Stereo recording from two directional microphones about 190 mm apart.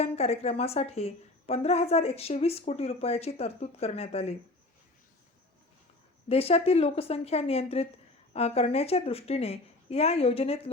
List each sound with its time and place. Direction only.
0.0 s a woman's voice: 35° left (ahead or behind)
6.2 s a woman's voice: 30° left (ahead or behind)